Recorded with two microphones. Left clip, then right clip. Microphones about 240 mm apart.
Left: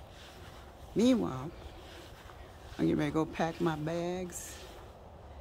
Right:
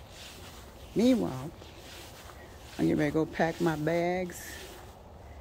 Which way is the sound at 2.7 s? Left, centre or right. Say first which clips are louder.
Right 3 dB; centre.